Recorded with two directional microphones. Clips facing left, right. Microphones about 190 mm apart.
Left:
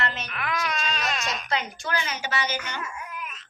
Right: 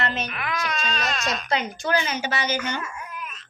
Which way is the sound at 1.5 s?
20° right (ahead or behind).